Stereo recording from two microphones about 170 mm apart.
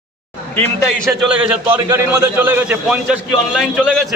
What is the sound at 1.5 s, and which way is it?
A man's voice, 10° right (ahead or behind).